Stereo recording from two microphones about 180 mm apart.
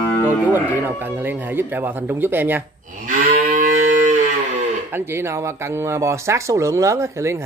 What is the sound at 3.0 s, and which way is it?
Moo, 50° right (ahead or behind).